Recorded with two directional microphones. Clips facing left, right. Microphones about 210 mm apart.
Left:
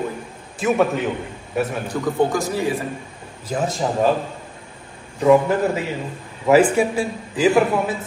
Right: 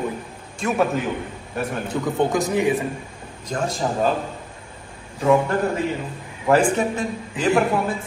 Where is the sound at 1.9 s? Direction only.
20° right (ahead or behind).